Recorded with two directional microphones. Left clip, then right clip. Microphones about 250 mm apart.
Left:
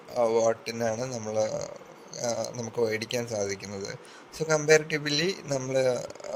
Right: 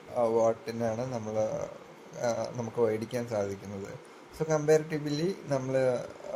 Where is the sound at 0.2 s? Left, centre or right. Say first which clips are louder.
Left 2 dB; left.